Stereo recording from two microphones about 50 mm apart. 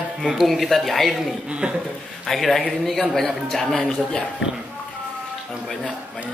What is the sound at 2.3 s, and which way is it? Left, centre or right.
A man's voice, centre.